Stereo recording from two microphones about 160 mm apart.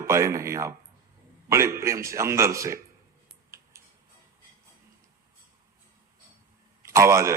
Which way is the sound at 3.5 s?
20° right (ahead or behind).